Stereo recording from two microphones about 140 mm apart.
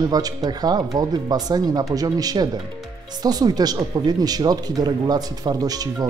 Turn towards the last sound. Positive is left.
turn(degrees=-25)  # may be behind; listen again after turning